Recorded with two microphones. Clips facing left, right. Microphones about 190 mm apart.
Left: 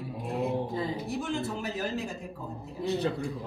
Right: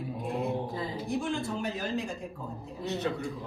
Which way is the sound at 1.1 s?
Centre (ahead or behind).